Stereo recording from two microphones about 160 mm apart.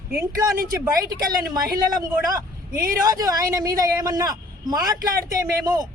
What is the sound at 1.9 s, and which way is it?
A woman's voice, 25° right (ahead or behind).